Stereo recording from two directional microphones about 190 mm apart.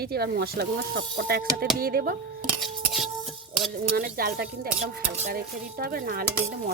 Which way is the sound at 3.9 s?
50° right (ahead or behind).